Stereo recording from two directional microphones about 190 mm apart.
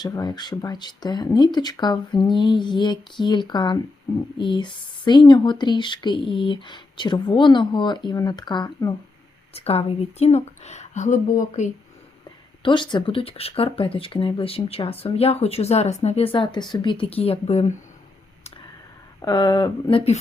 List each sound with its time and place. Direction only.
0.0 s speech: 20° left (ahead or behind); by 11.7 s 40° left (ahead or behind)
12.6 s speech: 25° left (ahead or behind)
19.2 s speech: 20° left (ahead or behind)